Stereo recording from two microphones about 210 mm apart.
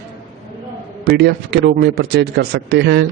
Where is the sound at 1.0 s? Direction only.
50° right (ahead or behind).